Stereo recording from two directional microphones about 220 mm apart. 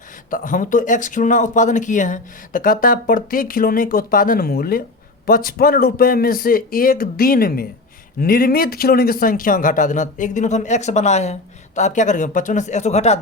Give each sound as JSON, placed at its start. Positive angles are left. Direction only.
{"t": 0.3, "sound": "a man's voice", "side_deg": 35}